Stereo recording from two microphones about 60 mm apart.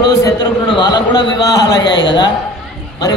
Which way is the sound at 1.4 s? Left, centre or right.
Left.